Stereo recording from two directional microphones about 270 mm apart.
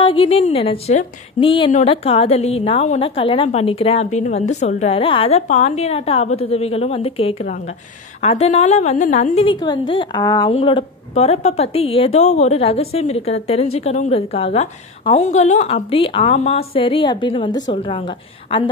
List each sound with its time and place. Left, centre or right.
0.0 s a woman's voice: centre